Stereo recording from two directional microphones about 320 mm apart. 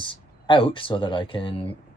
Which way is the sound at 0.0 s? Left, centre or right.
Centre.